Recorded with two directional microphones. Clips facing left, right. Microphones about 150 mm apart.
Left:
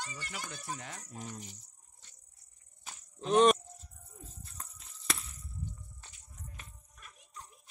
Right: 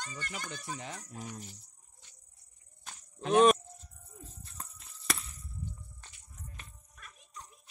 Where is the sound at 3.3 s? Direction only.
5° right (ahead or behind).